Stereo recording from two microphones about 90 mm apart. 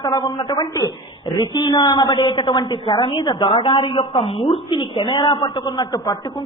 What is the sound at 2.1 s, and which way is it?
A woman's voice, 70° left (ahead or behind).